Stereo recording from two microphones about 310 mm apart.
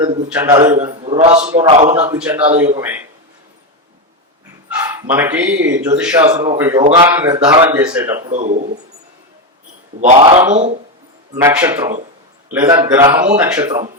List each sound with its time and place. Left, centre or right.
0.0 s a man's voice: centre
2.1 s a man's voice: centre
4.7 s a man's voice: centre
8.3 s speech: right
10.0 s speech: centre
11.3 s a man's voice: centre